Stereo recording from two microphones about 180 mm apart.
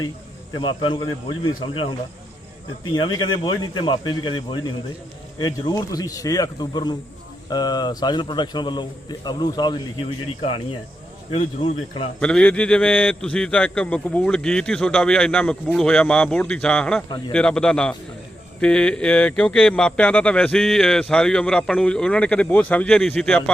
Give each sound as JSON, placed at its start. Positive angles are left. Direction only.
{"t": 0.5, "sound": "a man's voice", "side_deg": 25}
{"t": 11.6, "sound": "a man's voice", "side_deg": 30}
{"t": 12.2, "sound": "a man's voice", "side_deg": 5}